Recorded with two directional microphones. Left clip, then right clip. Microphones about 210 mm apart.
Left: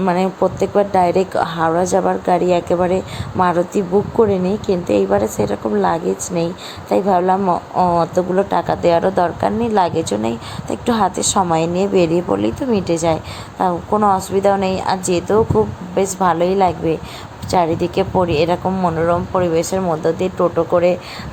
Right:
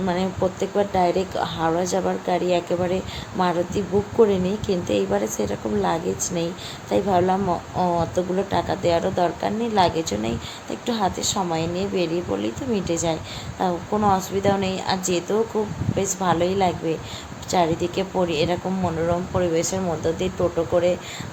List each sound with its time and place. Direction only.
0.0 s a woman's voice: 25° left (ahead or behind)